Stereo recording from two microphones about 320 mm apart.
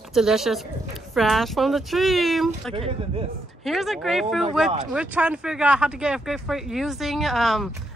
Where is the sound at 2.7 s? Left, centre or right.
Centre.